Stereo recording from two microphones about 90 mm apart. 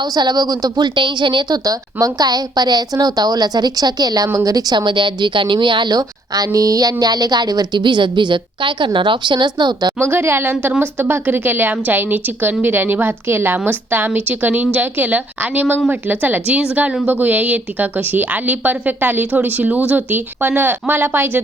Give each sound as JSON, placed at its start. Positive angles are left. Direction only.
{"t": 0.0, "sound": "a woman's voice", "side_deg": -50}
{"t": 10.0, "sound": "speech", "side_deg": -25}